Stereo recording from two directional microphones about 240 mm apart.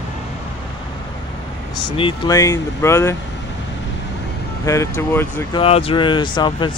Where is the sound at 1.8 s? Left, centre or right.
Centre.